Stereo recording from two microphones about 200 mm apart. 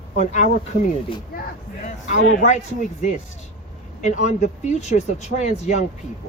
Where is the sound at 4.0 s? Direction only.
35° left (ahead or behind).